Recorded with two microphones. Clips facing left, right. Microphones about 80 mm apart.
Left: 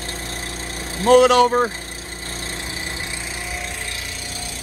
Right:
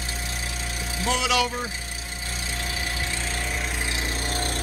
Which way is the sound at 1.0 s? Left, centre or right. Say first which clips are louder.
Left 12 dB; left.